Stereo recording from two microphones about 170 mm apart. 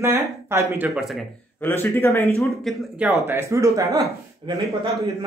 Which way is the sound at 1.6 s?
15° left (ahead or behind).